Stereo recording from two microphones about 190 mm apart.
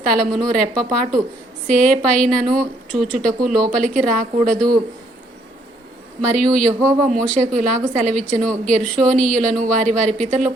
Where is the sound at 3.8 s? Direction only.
40° right (ahead or behind).